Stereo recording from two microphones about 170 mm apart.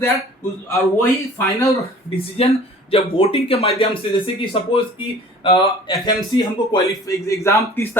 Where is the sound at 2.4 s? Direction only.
35° left (ahead or behind).